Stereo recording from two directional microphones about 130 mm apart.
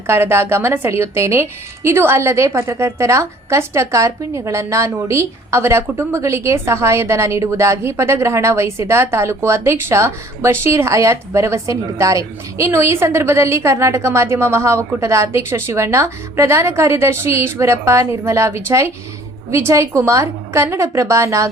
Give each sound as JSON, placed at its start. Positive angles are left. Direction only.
{"t": 0.1, "sound": "a woman's voice", "side_deg": -20}